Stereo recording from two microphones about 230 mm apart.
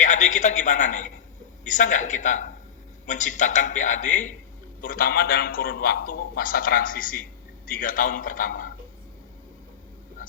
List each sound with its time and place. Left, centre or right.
0.0 s a man's voice: left